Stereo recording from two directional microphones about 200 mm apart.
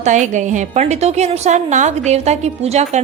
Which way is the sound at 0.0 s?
40° right (ahead or behind).